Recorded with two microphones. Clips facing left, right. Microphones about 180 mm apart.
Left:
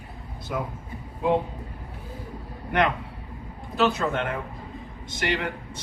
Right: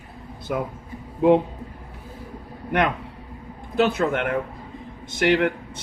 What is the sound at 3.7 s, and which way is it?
Speech, 55° right (ahead or behind).